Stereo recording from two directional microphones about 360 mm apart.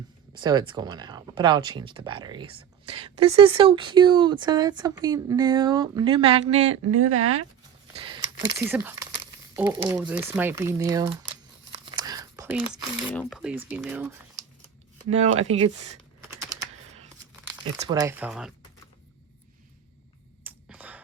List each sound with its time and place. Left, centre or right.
0.3 s speech: centre
6.8 s speech: right
7.9 s speech: centre
11.9 s whispering: centre
12.7 s speech: centre
15.8 s typing: centre
17.4 s speech: centre
20.4 s a sound: centre